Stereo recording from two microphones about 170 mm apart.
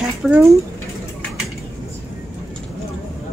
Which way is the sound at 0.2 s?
5° right (ahead or behind).